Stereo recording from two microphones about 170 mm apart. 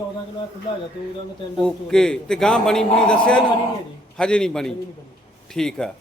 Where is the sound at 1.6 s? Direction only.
5° left (ahead or behind).